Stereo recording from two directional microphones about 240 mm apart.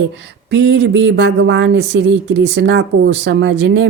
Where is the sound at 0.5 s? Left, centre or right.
Right.